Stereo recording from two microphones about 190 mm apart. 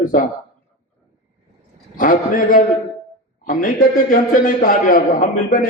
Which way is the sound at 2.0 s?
45° left (ahead or behind).